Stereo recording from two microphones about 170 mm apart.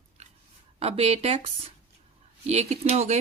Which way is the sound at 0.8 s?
35° right (ahead or behind).